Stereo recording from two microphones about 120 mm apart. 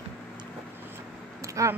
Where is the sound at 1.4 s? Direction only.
25° right (ahead or behind).